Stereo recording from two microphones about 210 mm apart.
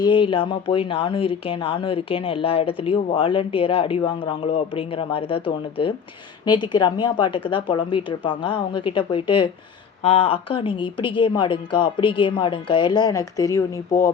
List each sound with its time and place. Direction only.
0.0 s speech: 25° left (ahead or behind)